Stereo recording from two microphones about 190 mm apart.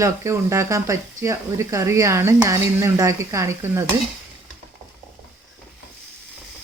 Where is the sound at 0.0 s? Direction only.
15° right (ahead or behind).